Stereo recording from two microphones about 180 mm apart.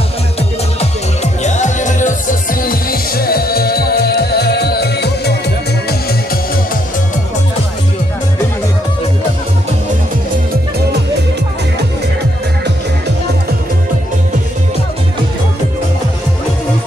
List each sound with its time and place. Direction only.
0.7 s music: 40° left (ahead or behind); by 5.3 s 65° left (ahead or behind)